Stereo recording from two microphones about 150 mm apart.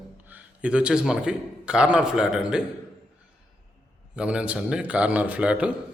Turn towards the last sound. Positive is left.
turn(degrees=-10)  # may be behind; listen again after turning